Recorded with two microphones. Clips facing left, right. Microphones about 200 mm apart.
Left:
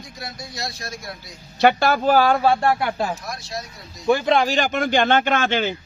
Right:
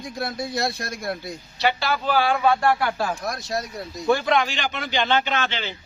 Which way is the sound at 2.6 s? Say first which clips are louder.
Left 1 dB; 25° left (ahead or behind).